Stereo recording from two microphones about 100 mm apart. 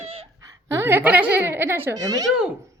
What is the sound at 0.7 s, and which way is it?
A woman's voice, 25° right (ahead or behind).